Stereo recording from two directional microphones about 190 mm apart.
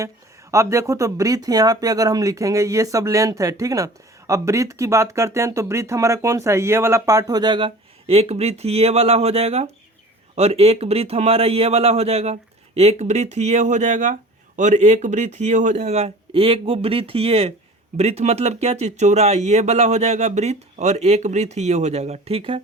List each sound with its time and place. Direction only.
0.5 s a man's voice: 15° right (ahead or behind)